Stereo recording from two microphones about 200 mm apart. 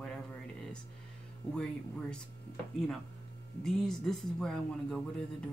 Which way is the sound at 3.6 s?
Centre (ahead or behind).